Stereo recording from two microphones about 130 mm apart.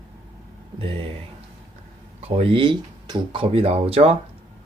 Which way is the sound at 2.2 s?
45° right (ahead or behind).